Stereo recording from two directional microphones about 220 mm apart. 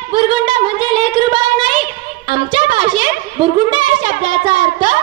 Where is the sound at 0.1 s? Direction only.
20° right (ahead or behind).